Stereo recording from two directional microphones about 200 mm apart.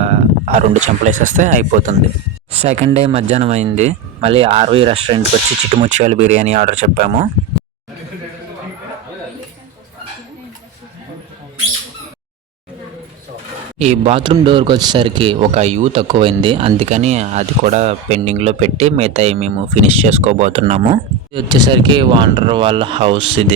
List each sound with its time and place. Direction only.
0.0 s speech: 30° right (ahead or behind)
13.7 s speech: 35° right (ahead or behind)